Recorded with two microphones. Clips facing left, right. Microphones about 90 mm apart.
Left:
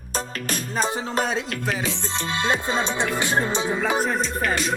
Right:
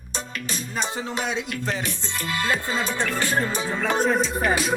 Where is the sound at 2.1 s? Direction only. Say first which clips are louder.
Left 1 dB; 25° left (ahead or behind).